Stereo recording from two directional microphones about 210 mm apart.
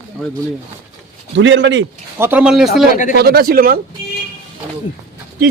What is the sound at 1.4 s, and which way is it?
Speech, 60° right (ahead or behind).